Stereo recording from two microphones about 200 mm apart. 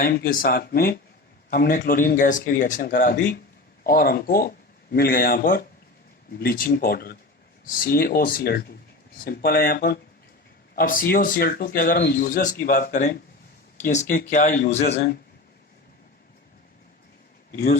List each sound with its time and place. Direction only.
0.0 s speech: 50° left (ahead or behind); by 15.0 s 35° left (ahead or behind)
17.5 s a man's voice: 45° left (ahead or behind)